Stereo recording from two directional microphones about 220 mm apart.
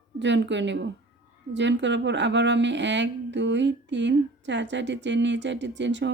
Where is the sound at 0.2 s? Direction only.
55° right (ahead or behind).